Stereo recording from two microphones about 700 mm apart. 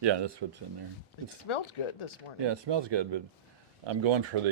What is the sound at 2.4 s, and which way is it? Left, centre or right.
Speech, right.